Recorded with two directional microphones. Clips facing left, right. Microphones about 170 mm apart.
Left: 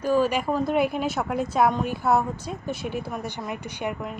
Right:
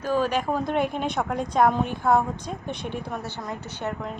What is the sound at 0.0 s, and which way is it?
A woman's voice, 10° left (ahead or behind).